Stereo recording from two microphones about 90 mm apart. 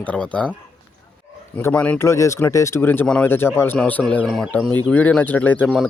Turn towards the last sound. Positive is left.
turn(degrees=10)  # may be behind; listen again after turning